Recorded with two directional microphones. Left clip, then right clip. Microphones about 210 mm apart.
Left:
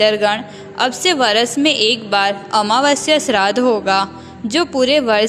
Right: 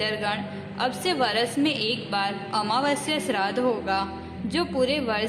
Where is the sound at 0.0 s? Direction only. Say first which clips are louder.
Left 13 dB; 30° left (ahead or behind).